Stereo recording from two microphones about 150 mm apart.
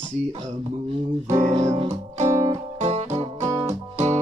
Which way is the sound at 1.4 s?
50° right (ahead or behind).